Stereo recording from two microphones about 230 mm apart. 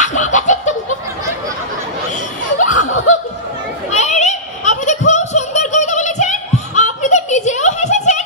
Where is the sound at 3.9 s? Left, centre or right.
Left.